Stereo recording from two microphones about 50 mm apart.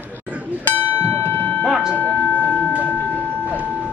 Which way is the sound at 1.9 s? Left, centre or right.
Left.